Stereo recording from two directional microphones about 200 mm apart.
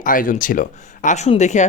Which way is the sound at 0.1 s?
45° left (ahead or behind).